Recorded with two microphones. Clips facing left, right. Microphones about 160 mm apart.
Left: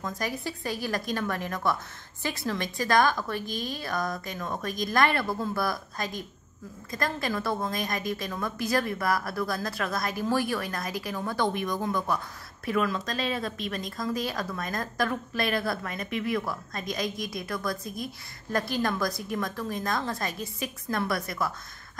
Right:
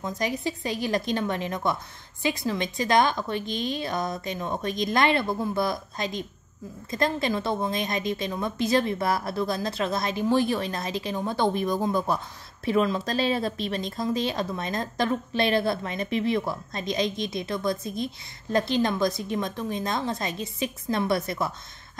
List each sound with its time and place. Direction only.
0.0 s speech: 20° right (ahead or behind)